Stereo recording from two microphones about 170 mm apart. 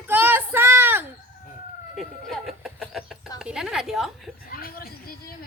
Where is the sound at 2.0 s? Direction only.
Centre (ahead or behind).